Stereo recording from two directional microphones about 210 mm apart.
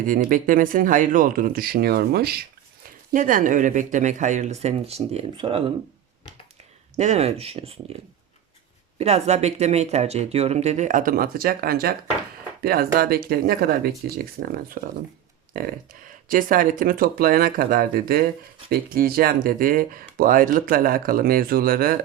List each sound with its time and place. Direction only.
0.1 s speech: 40° right (ahead or behind)
6.9 s speech: 35° right (ahead or behind)
9.0 s speech: 30° right (ahead or behind)
16.3 s speech: 40° right (ahead or behind)